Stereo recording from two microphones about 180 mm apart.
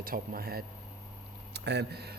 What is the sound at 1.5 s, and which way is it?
Speech, 70° right (ahead or behind).